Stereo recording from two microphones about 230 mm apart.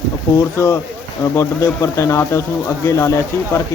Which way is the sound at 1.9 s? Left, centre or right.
Centre.